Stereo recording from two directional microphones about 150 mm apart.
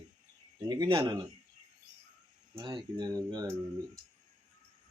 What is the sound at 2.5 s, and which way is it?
Speech, 30° right (ahead or behind).